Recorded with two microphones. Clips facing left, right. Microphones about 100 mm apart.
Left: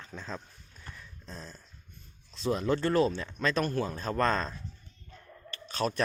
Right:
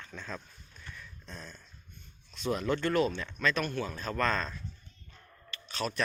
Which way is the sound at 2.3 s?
30° left (ahead or behind).